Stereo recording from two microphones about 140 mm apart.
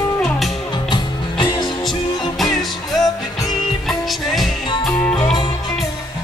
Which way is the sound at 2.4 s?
Centre (ahead or behind).